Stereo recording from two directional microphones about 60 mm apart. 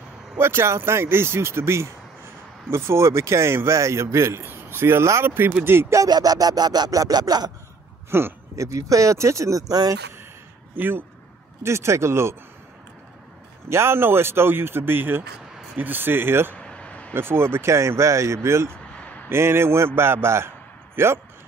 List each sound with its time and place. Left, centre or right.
0.4 s speech: right
5.9 s a sound: right
8.1 s speech: right
8.5 s speech: right
10.7 s speech: right
11.6 s speech: right
13.7 s speech: right
16.5 s vehicle: centre
17.1 s speech: right
18.7 s a sound: left
19.2 s a man's voice: right